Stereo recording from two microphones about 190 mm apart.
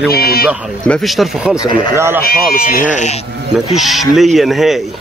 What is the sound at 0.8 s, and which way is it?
Speech, 5° left (ahead or behind).